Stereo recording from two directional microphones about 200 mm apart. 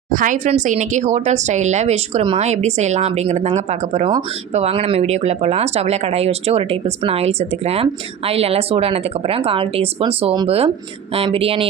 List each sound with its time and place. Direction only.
0.1 s speech: 40° right (ahead or behind)